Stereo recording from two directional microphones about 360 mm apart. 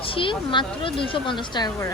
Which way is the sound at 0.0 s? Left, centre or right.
Centre.